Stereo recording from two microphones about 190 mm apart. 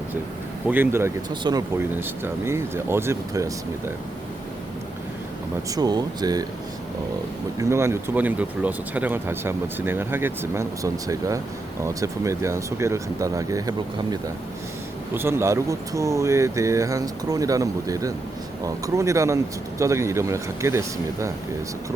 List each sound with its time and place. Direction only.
0.7 s speech: 10° right (ahead or behind)
1.8 s speech: 10° right (ahead or behind)
5.7 s speech: 20° right (ahead or behind)
7.6 s speech: 15° right (ahead or behind)